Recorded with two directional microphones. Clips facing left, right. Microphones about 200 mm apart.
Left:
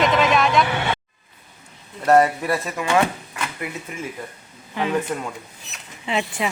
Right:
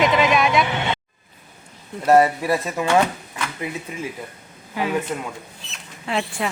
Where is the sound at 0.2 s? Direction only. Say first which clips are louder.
Even; centre (ahead or behind).